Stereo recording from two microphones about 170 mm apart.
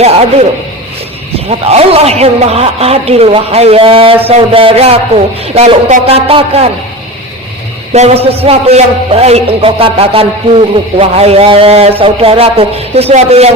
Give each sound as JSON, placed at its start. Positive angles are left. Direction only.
{"t": 0.0, "sound": "a man's voice", "side_deg": -40}
{"t": 1.5, "sound": "a man's voice", "side_deg": -35}
{"t": 7.9, "sound": "a man's voice", "side_deg": -40}